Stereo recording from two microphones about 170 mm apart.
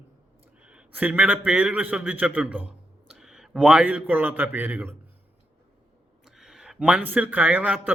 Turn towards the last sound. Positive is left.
turn(degrees=-10)  # may be behind; listen again after turning